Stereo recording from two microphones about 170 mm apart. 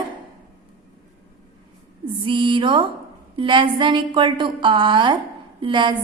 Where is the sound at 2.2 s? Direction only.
30° right (ahead or behind).